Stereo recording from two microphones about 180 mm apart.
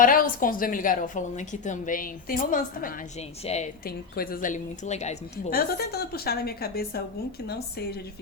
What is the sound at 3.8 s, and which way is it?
A woman's voice, 55° left (ahead or behind).